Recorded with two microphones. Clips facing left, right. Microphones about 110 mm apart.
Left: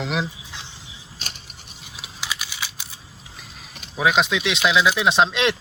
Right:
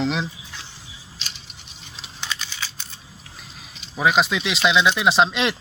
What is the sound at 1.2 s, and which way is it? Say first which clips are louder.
Mechanisms: left 2 dB; 45° left (ahead or behind).